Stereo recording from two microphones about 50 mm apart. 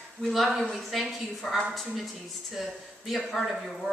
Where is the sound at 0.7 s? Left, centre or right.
Centre.